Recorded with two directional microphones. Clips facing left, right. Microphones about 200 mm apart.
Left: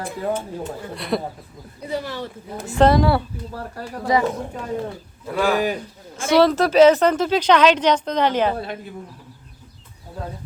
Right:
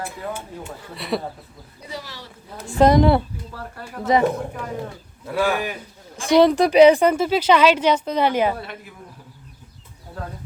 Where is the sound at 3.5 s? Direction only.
30° left (ahead or behind).